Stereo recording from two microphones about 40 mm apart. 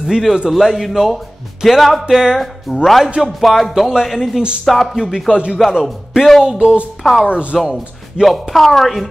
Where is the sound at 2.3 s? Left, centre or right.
Centre.